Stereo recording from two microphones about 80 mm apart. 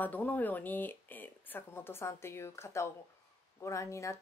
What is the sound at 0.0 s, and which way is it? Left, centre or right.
Speech, left.